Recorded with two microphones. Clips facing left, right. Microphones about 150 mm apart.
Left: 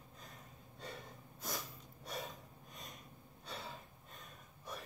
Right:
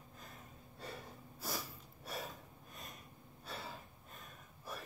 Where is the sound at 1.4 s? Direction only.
5° right (ahead or behind).